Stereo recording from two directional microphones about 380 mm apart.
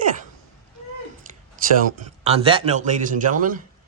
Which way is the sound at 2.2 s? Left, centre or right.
Centre.